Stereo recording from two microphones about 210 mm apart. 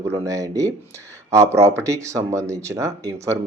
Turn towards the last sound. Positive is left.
turn(degrees=-15)  # may be behind; listen again after turning